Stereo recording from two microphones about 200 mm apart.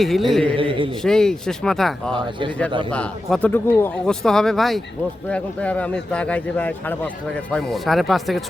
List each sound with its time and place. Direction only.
0.0 s speech: centre (ahead or behind)
0.4 s a man's voice: 25° right (ahead or behind)
1.0 s a man's voice: 5° left (ahead or behind)